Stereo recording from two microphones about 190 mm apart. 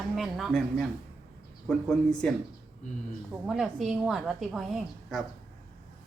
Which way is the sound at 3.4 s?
Centre (ahead or behind).